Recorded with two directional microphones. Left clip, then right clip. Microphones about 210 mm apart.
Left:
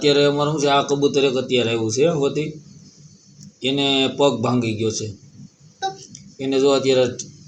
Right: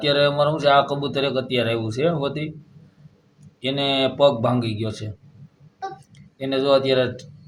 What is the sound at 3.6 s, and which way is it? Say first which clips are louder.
Speech: left 2 dB; 20° right (ahead or behind).